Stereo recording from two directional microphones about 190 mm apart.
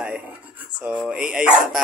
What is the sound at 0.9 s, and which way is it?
Speech, 5° right (ahead or behind).